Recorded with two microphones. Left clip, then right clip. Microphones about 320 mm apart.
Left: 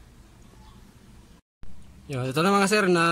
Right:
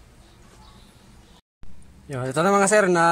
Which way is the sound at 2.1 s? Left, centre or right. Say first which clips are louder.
Right 3 dB; centre.